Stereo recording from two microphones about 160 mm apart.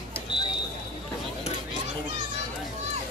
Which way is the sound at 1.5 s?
40° left (ahead or behind).